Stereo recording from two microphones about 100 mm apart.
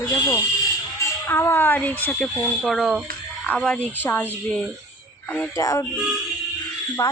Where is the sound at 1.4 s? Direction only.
20° left (ahead or behind).